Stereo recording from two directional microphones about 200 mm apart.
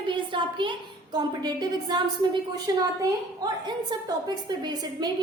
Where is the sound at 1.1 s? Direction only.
20° right (ahead or behind).